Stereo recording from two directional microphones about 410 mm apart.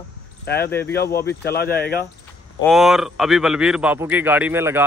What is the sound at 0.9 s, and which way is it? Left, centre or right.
Speech, left.